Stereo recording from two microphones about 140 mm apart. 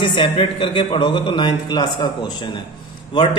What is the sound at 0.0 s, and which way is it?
A man's voice, 40° left (ahead or behind).